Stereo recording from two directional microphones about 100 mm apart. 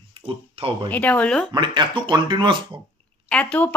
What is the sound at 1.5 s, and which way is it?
Speech, 50° right (ahead or behind).